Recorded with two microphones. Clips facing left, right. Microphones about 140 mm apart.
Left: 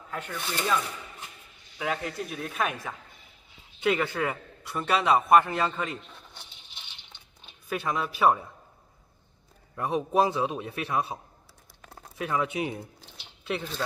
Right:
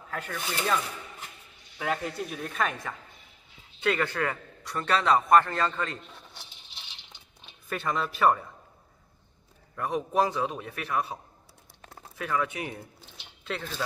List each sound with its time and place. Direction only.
0.1 s speech: 5° right (ahead or behind)
1.8 s a man's voice: centre (ahead or behind)
7.7 s speech: 5° left (ahead or behind)
9.8 s a man's voice: 20° left (ahead or behind)
12.2 s a man's voice: 20° left (ahead or behind)